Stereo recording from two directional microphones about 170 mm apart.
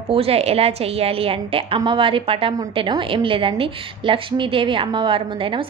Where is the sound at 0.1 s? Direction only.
35° right (ahead or behind).